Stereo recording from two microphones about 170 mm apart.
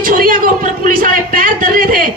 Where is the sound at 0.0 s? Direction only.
55° right (ahead or behind).